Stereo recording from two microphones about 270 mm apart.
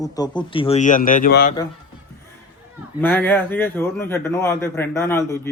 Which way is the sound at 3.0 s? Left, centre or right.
Centre.